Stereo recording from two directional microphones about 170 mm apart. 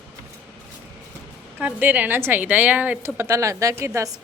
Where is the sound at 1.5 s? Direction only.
10° right (ahead or behind).